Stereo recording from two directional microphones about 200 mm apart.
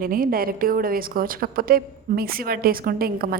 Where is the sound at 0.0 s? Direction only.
45° right (ahead or behind).